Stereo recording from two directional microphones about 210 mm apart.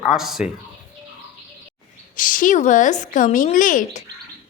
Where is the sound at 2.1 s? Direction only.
40° left (ahead or behind).